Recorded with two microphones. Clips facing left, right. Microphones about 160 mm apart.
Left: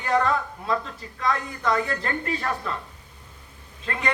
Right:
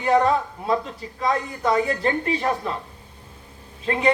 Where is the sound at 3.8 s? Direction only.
25° right (ahead or behind).